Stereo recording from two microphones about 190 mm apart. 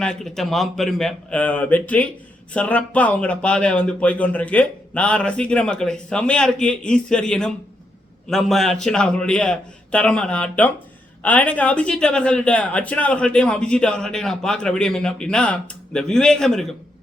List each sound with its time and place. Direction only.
0.0 s speech: 5° left (ahead or behind)